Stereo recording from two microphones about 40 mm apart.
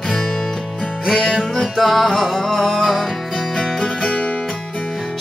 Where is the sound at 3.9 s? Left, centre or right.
Left.